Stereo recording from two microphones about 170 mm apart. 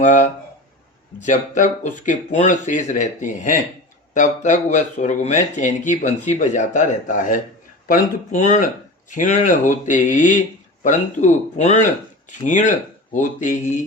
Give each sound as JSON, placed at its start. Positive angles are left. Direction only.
{"t": 0.0, "sound": "speech", "side_deg": 45}